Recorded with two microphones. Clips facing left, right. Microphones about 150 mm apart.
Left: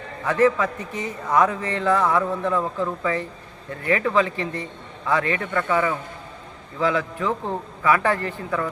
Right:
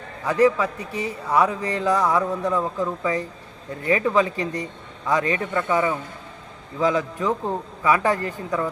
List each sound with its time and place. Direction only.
0.3 s speech: 10° right (ahead or behind)